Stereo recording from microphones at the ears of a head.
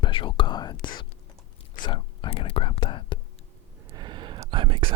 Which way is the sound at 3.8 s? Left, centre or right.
Right.